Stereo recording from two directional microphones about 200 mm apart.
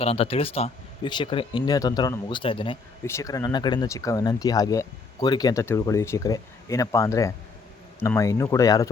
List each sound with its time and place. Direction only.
0.0 s speech: 30° left (ahead or behind)
3.1 s speech: 15° left (ahead or behind)